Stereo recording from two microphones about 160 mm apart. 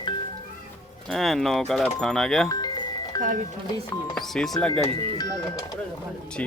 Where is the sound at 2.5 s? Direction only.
25° left (ahead or behind).